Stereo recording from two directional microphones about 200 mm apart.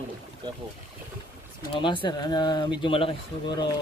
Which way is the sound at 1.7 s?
25° left (ahead or behind).